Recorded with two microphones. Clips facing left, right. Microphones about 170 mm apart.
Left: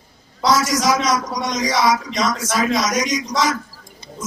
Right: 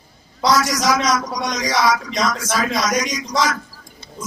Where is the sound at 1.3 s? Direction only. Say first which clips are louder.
Left 1 dB; centre (ahead or behind).